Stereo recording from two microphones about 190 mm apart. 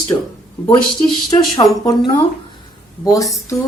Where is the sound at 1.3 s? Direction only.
20° left (ahead or behind).